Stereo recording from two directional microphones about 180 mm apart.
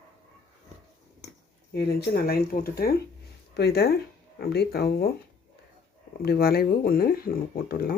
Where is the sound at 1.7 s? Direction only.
65° left (ahead or behind).